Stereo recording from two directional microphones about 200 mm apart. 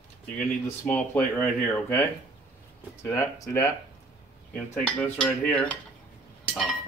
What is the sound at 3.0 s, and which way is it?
Speech, 15° left (ahead or behind).